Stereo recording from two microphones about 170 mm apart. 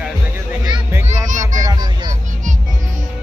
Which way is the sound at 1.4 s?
25° right (ahead or behind).